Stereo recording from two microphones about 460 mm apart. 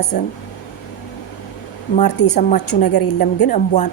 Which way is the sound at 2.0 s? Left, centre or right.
Left.